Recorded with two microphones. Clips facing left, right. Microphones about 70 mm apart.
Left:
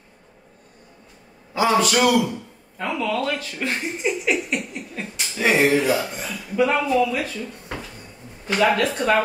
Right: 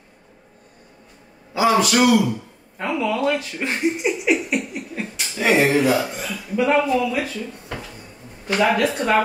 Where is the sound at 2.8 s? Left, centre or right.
Centre.